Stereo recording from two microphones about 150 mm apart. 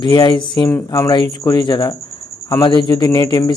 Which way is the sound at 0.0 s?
30° left (ahead or behind).